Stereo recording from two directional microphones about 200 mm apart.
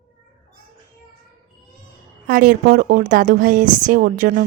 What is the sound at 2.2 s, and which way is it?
A woman's voice, 45° right (ahead or behind).